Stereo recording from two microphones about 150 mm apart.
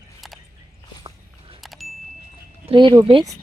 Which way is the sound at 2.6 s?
30° right (ahead or behind).